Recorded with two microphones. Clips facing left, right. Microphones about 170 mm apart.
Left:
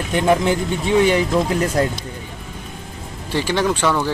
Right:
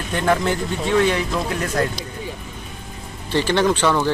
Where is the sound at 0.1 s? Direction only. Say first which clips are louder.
Left 3 dB; 15° left (ahead or behind).